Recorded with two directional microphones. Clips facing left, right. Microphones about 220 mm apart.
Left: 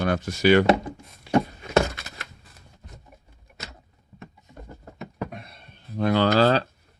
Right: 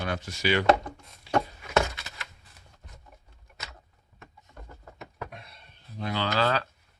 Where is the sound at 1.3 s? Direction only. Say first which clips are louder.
Left 5 dB; 50° left (ahead or behind).